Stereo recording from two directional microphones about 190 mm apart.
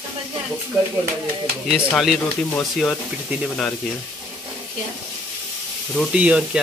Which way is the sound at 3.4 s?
5° left (ahead or behind).